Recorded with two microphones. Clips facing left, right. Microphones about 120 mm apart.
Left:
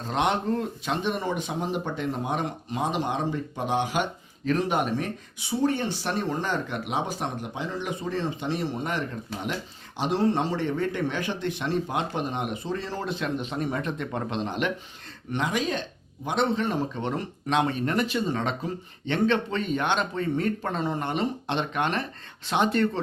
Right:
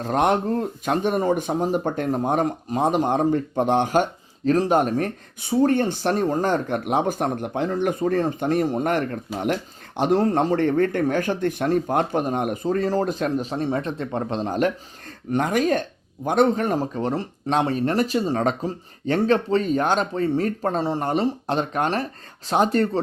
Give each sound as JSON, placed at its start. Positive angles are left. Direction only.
{"t": 0.0, "sound": "speech", "side_deg": -45}